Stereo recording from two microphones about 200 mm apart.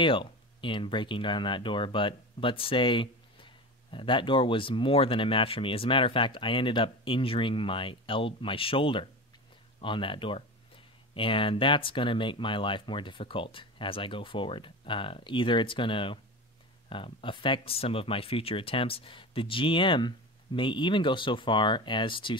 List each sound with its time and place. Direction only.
0.0 s speech: 25° left (ahead or behind)